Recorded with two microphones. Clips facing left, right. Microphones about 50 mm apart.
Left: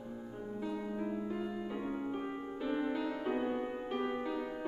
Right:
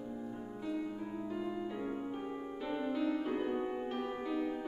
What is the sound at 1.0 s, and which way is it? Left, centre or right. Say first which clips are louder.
Music: left 1 dB; centre.